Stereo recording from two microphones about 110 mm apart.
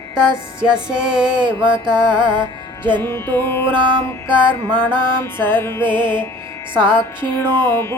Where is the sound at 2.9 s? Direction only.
20° left (ahead or behind).